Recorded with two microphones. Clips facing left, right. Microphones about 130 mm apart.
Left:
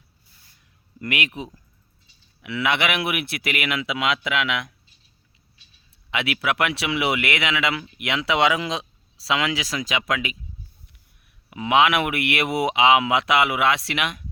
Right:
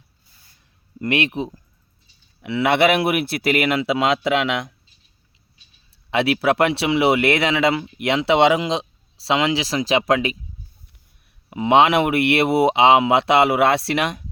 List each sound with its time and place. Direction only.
0.9 s speech: 30° right (ahead or behind)
6.1 s speech: 35° right (ahead or behind)
11.5 s speech: 30° right (ahead or behind)